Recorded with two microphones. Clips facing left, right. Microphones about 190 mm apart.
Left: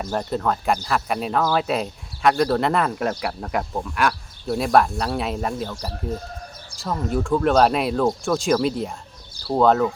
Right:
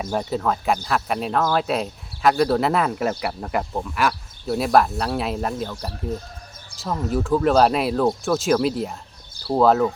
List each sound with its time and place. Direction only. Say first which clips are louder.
0.0 s speech: even; 5° right (ahead or behind)
6.7 s speech: even; centre (ahead or behind)